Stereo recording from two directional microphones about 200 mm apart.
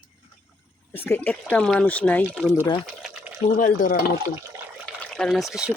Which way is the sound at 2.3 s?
5° right (ahead or behind).